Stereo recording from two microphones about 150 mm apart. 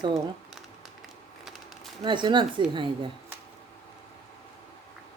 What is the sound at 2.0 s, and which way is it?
Speech, 30° right (ahead or behind).